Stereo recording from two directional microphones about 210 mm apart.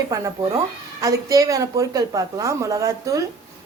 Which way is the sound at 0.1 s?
15° right (ahead or behind).